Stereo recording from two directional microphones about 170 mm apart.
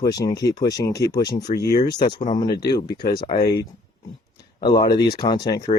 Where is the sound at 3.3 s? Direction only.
75° left (ahead or behind).